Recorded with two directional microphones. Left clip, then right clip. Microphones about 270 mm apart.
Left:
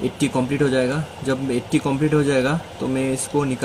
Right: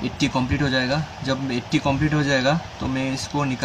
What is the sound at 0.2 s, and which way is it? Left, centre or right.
Speech, centre.